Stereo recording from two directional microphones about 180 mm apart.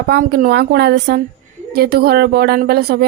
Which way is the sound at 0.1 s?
50° right (ahead or behind).